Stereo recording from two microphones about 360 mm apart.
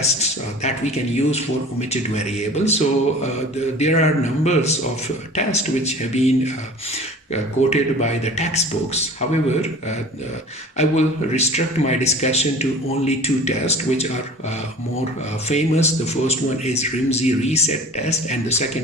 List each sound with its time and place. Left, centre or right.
0.0 s a man's voice: centre
7.7 s a man's voice: centre
10.8 s a man's voice: centre
15.4 s a man's voice: centre